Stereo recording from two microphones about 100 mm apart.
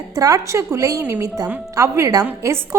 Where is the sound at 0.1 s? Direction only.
35° right (ahead or behind).